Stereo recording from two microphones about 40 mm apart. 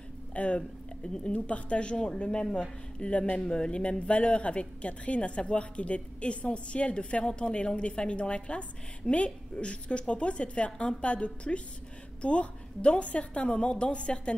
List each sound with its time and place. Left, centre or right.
0.3 s a woman's voice: left